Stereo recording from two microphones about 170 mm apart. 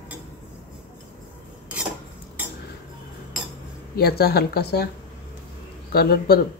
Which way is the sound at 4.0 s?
65° left (ahead or behind).